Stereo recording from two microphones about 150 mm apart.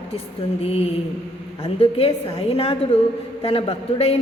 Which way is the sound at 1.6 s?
40° left (ahead or behind).